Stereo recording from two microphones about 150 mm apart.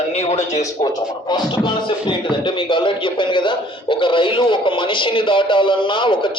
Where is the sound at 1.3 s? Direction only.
30° left (ahead or behind).